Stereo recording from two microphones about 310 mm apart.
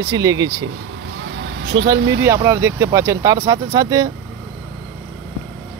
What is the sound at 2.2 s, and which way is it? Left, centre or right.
Speech, centre.